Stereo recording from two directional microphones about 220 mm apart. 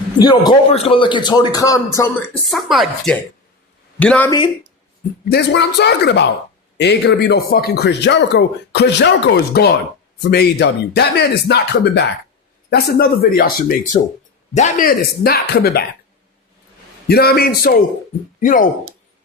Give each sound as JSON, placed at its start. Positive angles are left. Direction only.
{"t": 0.2, "sound": "speech", "side_deg": 20}
{"t": 2.5, "sound": "speech", "side_deg": 0}
{"t": 5.3, "sound": "a man's voice", "side_deg": 50}
{"t": 17.1, "sound": "a man's voice", "side_deg": 45}